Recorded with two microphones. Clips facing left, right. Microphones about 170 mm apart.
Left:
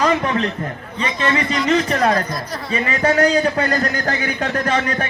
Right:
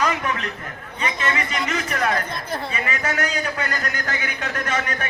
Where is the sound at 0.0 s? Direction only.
30° left (ahead or behind).